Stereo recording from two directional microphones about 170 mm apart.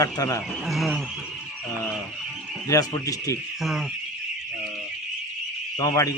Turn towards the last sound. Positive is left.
turn(degrees=20)  # may be behind; listen again after turning